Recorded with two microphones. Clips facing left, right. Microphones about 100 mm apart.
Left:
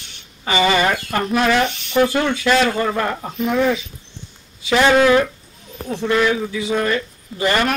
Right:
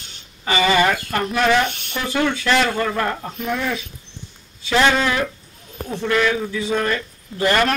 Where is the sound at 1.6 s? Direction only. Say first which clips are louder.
Left 2 dB; 50° right (ahead or behind).